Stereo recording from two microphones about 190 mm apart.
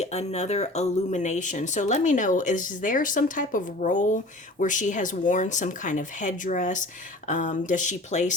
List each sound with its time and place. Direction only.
0.0 s speech: 35° left (ahead or behind)